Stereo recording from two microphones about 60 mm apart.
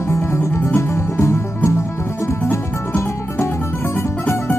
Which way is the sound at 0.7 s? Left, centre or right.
Left.